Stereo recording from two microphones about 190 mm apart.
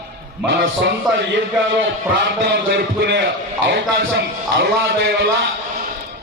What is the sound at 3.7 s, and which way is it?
Speech, 80° right.